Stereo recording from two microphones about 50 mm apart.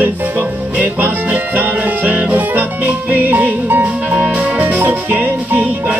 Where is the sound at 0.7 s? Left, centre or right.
Right.